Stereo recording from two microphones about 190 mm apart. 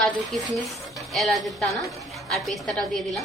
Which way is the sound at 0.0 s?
Centre (ahead or behind).